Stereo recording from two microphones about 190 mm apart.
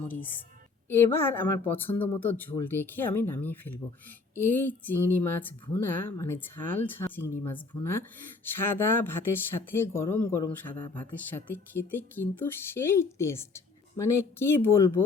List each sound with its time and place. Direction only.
0.0 s speech: 10° left (ahead or behind)
8.5 s speech: 10° left (ahead or behind)